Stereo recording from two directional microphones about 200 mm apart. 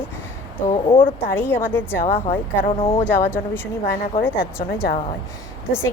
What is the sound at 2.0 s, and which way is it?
Speech, 35° left (ahead or behind).